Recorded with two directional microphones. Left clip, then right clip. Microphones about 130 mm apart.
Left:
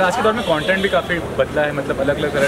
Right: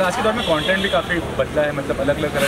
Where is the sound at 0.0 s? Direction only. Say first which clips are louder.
Left 2 dB; 20° left (ahead or behind).